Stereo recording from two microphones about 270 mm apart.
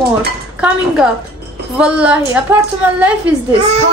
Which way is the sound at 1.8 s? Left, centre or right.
Centre.